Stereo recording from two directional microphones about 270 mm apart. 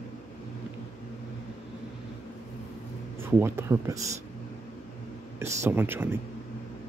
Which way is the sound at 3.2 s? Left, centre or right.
Centre.